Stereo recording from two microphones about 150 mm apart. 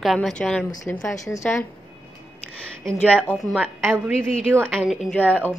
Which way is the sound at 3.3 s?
5° left (ahead or behind).